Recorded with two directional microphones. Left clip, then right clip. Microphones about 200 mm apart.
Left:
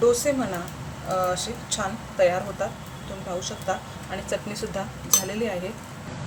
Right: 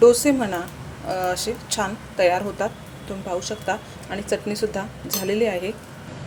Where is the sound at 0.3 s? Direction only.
45° right (ahead or behind).